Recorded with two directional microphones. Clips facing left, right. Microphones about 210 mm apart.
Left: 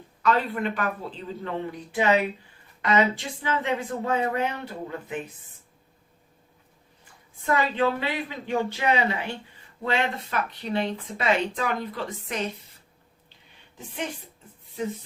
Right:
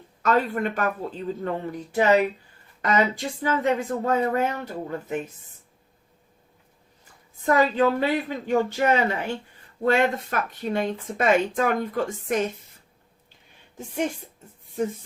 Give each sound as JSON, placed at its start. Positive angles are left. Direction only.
{"t": 0.2, "sound": "speech", "side_deg": -45}
{"t": 7.4, "sound": "speech", "side_deg": -40}
{"t": 13.7, "sound": "speech", "side_deg": -45}